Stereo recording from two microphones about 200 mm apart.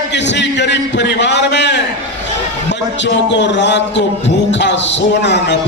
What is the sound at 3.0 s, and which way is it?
A man's voice, 60° left (ahead or behind).